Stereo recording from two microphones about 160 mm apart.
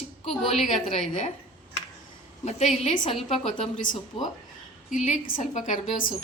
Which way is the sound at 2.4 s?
45° left (ahead or behind).